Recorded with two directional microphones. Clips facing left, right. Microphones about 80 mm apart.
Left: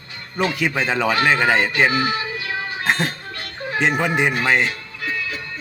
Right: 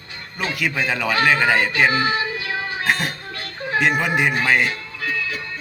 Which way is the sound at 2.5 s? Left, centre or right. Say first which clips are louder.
Right 1 dB; right.